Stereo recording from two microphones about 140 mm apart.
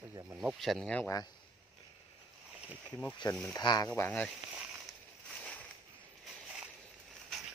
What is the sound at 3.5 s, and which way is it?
Speech, 30° left (ahead or behind).